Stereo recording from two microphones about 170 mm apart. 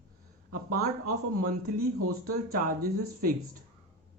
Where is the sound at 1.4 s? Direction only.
60° right (ahead or behind).